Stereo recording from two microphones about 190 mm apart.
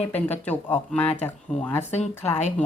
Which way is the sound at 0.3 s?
10° left (ahead or behind).